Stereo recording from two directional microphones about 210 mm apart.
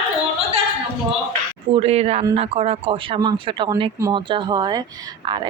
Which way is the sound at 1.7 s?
30° right (ahead or behind).